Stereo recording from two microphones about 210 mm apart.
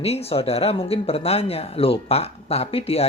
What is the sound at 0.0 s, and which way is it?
Speech, 30° left (ahead or behind).